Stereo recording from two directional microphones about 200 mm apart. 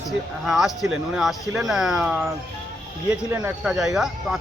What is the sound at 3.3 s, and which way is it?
Speech, 5° right (ahead or behind).